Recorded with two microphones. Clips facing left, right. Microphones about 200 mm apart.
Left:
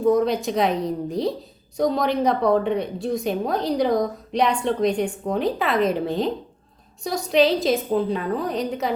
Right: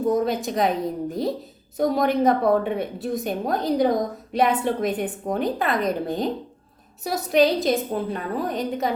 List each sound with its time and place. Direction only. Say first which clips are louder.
0.1 s a woman's voice: left 5 dB; centre (ahead or behind)
7.0 s a woman's voice: even; 5° right (ahead or behind)